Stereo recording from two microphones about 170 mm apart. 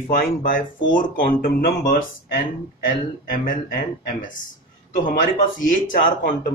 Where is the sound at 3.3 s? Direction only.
55° left (ahead or behind).